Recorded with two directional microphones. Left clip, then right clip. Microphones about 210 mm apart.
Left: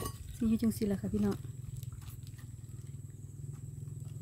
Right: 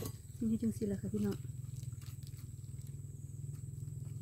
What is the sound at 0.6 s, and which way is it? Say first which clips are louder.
Speech: left 4 dB; 40° left (ahead or behind).